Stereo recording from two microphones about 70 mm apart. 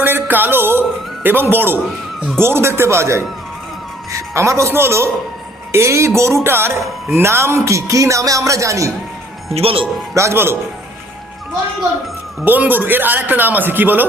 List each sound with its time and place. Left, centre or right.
0.0 s a sound: right
2.4 s speech: right
10.2 s speech: right
12.5 s a man's voice: right